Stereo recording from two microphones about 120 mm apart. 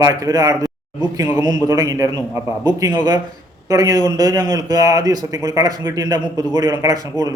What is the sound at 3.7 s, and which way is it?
A man's voice, 30° right (ahead or behind).